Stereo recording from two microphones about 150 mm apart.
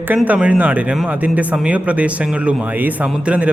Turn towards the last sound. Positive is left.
turn(degrees=-10)  # may be behind; listen again after turning